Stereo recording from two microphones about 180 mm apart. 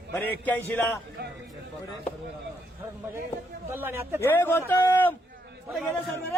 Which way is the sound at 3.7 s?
10° right (ahead or behind).